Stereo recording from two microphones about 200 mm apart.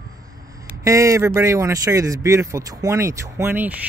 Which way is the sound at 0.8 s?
15° right (ahead or behind).